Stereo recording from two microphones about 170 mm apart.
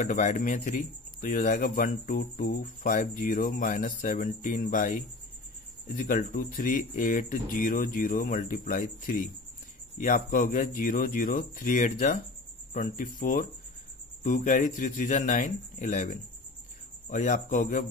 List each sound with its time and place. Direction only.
0.0 s speech: 45° left (ahead or behind)